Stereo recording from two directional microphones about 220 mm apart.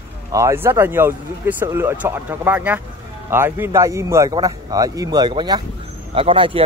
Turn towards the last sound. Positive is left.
turn(degrees=-25)  # may be behind; listen again after turning